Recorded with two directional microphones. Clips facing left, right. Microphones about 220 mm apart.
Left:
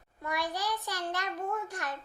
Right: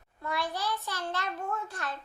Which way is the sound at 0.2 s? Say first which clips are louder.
Right 1 dB; 15° left (ahead or behind).